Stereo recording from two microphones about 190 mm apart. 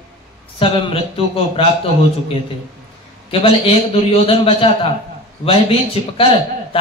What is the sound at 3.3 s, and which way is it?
A man's voice, 30° left (ahead or behind).